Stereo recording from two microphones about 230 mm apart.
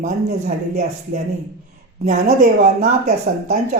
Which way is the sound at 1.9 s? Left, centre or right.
Right.